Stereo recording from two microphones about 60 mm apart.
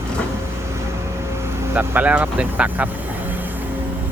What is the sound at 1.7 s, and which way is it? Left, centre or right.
Speech, right.